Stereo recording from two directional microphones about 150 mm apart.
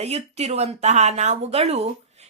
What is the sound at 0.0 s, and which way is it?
Speech, 45° right (ahead or behind).